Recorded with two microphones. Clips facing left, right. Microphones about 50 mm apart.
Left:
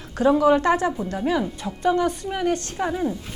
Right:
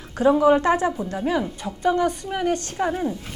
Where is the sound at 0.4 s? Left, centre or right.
Right.